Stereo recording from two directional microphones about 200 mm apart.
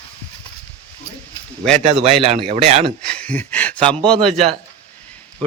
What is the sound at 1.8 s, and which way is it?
Speech, 30° right (ahead or behind).